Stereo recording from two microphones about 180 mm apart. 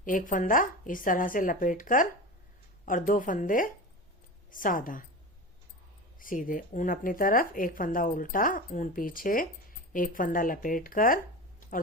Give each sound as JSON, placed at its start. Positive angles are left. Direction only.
{"t": 0.0, "sound": "speech", "side_deg": 50}
{"t": 6.1, "sound": "speech", "side_deg": 50}